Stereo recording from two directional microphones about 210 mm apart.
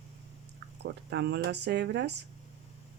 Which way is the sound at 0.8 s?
55° right (ahead or behind).